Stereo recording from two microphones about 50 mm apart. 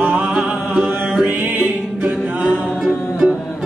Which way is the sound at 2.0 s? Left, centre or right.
Right.